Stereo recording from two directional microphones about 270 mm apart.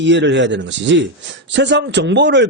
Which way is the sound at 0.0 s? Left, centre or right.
Right.